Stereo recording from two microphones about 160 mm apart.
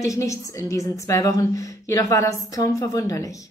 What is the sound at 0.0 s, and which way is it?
A woman's voice, 20° left (ahead or behind).